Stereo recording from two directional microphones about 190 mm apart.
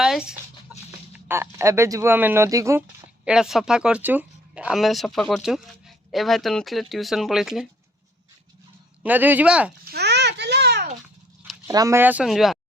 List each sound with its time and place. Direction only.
0.0 s chicken: 5° right (ahead or behind)
1.1 s speech: 15° right (ahead or behind)
3.2 s speech: 5° right (ahead or behind)
9.0 s speech: 10° right (ahead or behind)
9.9 s a sound: 60° right (ahead or behind)
11.7 s speech: 15° right (ahead or behind); by 12.5 s centre (ahead or behind)